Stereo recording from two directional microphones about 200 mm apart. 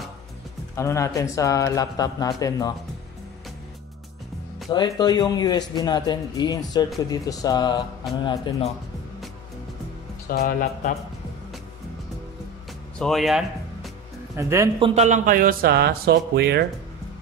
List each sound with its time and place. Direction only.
0.7 s speech: 15° left (ahead or behind)
4.6 s a man's voice: 20° left (ahead or behind)
10.2 s speech: 50° left (ahead or behind)
13.0 s music: centre (ahead or behind)
14.3 s speech: 15° right (ahead or behind)
14.8 s speech: 35° right (ahead or behind); by 16.6 s 55° right (ahead or behind)